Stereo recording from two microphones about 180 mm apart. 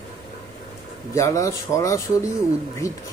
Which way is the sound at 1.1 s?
15° left (ahead or behind).